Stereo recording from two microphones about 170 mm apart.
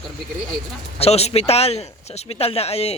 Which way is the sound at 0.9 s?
35° left (ahead or behind).